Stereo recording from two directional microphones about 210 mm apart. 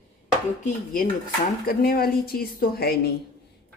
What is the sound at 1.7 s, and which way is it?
A woman's voice, 45° left (ahead or behind).